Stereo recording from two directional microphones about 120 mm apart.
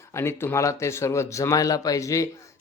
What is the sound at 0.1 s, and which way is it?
Speech, 20° left (ahead or behind).